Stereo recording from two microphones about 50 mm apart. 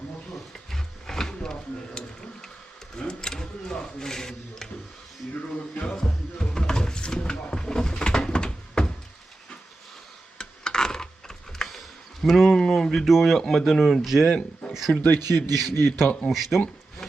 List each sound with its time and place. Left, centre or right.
0.5 s roaring cats: centre
3.0 s speech: centre
5.7 s a sound: centre
10.3 s a sound: centre
12.2 s speech: centre
13.1 s speech: centre
14.3 s speech: centre
14.7 s a sound: centre
15.0 s speech: left
16.3 s speech: centre